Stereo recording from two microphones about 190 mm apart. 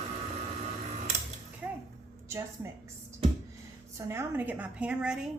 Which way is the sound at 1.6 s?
5° right (ahead or behind).